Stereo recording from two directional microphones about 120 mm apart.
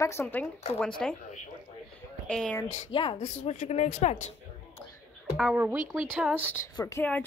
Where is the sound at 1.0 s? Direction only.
5° left (ahead or behind).